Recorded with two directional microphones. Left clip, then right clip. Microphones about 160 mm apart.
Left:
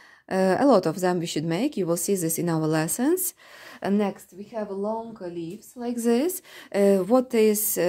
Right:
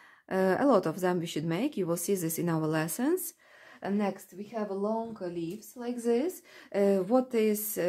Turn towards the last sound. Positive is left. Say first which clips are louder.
# left 7 dB
turn(degrees=40)  # may be behind; listen again after turning